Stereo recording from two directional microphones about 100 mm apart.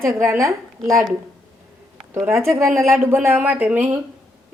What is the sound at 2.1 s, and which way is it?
Speech, 25° right (ahead or behind).